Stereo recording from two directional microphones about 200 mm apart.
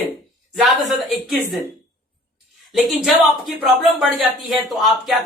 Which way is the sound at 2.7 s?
Centre (ahead or behind).